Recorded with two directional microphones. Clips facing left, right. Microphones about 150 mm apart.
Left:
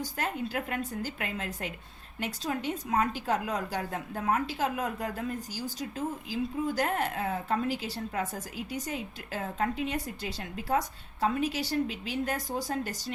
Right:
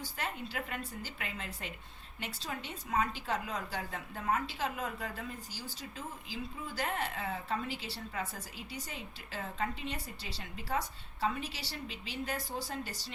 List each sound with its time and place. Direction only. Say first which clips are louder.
0.0 s speech: left 7 dB; 45° left (ahead or behind)